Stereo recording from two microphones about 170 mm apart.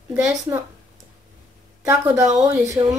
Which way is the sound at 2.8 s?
25° right (ahead or behind).